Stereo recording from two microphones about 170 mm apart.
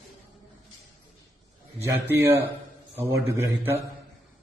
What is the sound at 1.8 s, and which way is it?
Speech, 15° right (ahead or behind).